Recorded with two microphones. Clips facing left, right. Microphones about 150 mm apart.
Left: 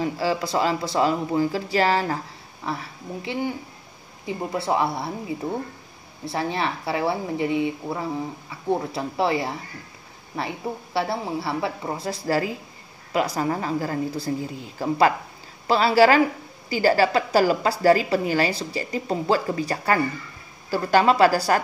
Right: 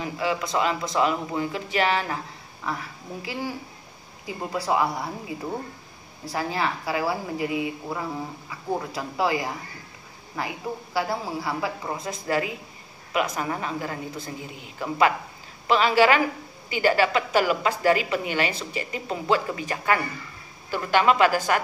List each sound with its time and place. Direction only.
0.0 s a woman's voice: 35° left (ahead or behind)
6.2 s speech: 25° left (ahead or behind)
8.9 s a woman's voice: 25° left (ahead or behind)